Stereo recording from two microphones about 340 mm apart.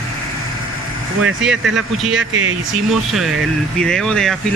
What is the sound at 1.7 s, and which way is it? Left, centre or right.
Speech, centre.